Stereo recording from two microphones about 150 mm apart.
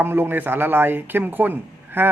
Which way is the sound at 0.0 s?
15° right (ahead or behind).